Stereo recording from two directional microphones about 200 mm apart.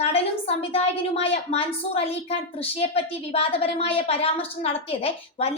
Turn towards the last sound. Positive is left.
turn(degrees=30)  # may be behind; listen again after turning